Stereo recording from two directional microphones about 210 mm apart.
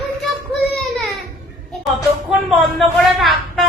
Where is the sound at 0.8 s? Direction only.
Centre (ahead or behind).